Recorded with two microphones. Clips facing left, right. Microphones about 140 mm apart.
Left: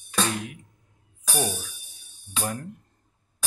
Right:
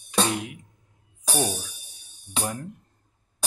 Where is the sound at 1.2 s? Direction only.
30° right (ahead or behind).